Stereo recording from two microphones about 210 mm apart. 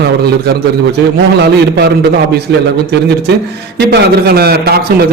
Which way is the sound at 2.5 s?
55° right (ahead or behind).